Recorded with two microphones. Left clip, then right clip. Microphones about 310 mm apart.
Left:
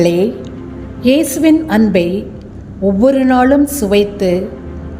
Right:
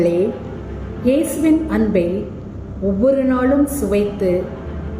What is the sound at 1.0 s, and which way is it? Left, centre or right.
A woman's voice, left.